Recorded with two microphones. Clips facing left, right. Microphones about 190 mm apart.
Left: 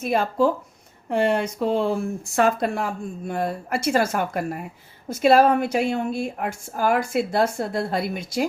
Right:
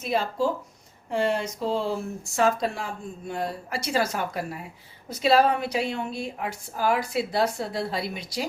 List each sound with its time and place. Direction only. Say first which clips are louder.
0.0 s a woman's voice: left 5 dB; 55° left (ahead or behind)